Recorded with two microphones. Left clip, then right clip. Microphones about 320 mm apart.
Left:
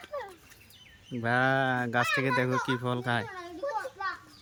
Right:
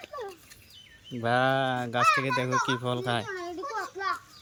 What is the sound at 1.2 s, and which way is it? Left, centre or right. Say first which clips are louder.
A child's voice: right 1 dB; centre.